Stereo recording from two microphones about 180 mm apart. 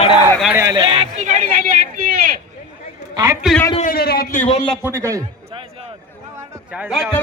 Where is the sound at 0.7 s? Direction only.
30° right (ahead or behind); by 2.3 s 50° right (ahead or behind).